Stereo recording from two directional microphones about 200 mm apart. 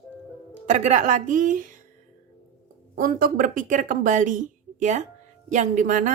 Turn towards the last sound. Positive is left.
turn(degrees=-40)  # may be behind; listen again after turning